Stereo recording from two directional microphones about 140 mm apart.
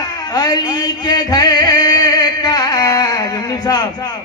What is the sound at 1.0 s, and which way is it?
Music, 30° left (ahead or behind).